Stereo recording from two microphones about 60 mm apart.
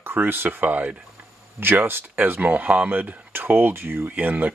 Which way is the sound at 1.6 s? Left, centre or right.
Right.